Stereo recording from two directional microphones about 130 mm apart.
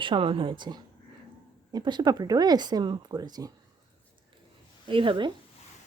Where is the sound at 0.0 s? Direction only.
40° right (ahead or behind).